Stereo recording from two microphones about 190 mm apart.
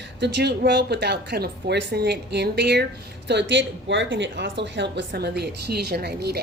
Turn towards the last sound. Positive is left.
turn(degrees=-60)  # may be behind; listen again after turning